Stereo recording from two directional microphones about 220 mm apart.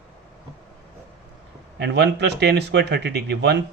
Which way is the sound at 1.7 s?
50° right (ahead or behind).